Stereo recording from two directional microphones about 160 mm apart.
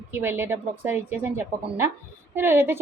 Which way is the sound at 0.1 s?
15° right (ahead or behind).